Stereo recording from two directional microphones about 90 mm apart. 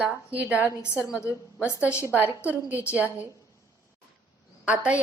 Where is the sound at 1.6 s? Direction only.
30° left (ahead or behind).